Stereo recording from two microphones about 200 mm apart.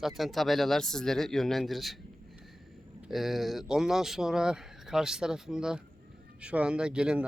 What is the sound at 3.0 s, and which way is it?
A man's voice, centre (ahead or behind).